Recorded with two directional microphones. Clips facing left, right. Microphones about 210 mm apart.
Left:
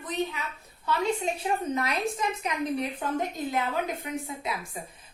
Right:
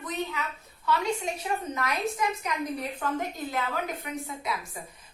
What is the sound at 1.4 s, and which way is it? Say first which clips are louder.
A woman's voice: left 3 dB; 30° left (ahead or behind).